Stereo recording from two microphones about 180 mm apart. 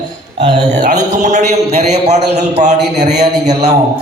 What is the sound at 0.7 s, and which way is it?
A man's voice, 40° right (ahead or behind).